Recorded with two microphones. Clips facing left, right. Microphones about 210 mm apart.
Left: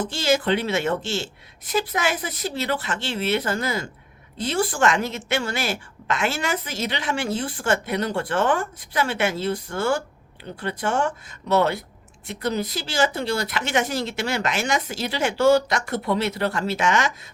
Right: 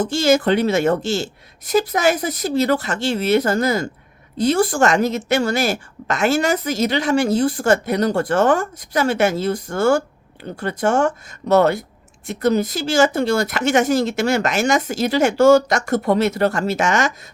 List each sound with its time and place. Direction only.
0.0 s a woman's voice: 45° right (ahead or behind)